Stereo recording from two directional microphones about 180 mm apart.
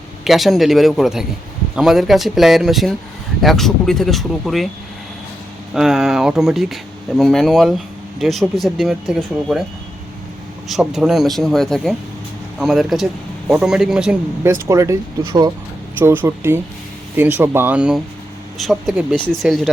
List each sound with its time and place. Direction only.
0.3 s speech: centre (ahead or behind)
5.7 s speech: centre (ahead or behind)
10.7 s speech: centre (ahead or behind)
14.7 s speech: 15° right (ahead or behind)
16.0 s speech: 10° right (ahead or behind)